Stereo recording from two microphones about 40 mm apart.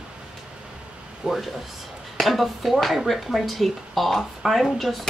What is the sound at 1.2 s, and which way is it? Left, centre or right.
A woman's voice, centre.